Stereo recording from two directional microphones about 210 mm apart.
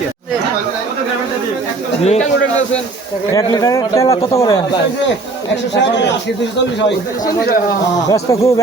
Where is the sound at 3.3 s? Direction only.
15° left (ahead or behind).